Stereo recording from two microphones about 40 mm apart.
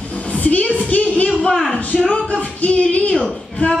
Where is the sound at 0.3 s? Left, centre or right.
Left.